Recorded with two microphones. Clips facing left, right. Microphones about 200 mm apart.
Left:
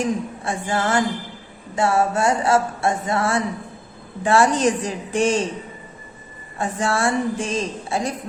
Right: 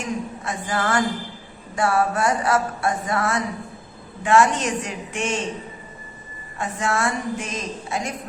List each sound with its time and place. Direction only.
0.0 s a sound: 30° left (ahead or behind)
4.2 s a woman's voice: 35° left (ahead or behind)
6.6 s a woman's voice: 30° left (ahead or behind)